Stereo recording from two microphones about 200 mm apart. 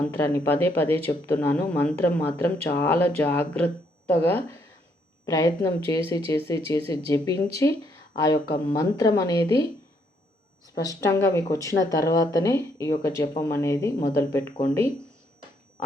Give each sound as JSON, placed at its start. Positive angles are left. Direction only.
{"t": 0.0, "sound": "speech", "side_deg": 10}
{"t": 10.8, "sound": "speech", "side_deg": 15}